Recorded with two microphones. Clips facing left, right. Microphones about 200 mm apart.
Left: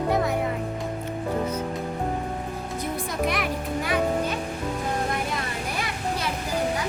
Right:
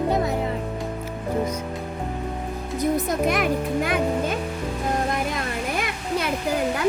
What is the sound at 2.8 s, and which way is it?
Music, 45° right (ahead or behind).